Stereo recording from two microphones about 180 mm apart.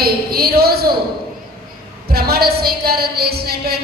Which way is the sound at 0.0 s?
60° right (ahead or behind).